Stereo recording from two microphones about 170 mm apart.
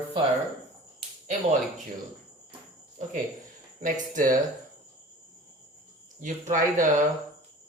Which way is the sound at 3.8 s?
50° right (ahead or behind).